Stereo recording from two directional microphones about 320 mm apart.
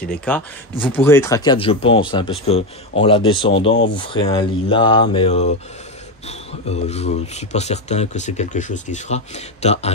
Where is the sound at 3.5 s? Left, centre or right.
Left.